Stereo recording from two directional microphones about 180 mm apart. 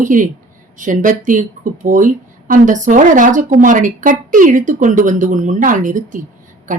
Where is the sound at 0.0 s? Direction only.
45° right (ahead or behind).